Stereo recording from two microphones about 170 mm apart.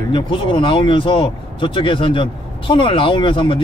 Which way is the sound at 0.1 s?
30° left (ahead or behind).